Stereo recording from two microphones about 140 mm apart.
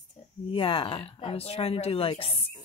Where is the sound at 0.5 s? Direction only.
40° left (ahead or behind).